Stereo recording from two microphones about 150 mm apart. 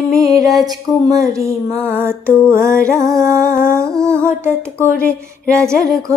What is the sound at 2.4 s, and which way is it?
Speech, 15° right (ahead or behind).